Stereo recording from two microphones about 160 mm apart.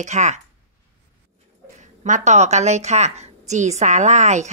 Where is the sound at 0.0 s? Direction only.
45° right (ahead or behind).